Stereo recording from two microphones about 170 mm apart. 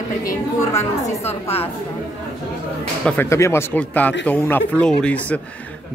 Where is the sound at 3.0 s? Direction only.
15° left (ahead or behind).